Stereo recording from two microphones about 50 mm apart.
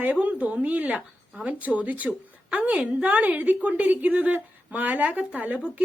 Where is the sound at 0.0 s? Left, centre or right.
Right.